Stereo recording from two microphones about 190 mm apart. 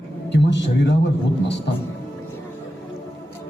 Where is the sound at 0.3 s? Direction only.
65° left (ahead or behind).